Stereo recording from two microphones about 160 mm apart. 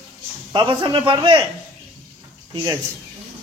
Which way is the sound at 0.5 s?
30° right (ahead or behind).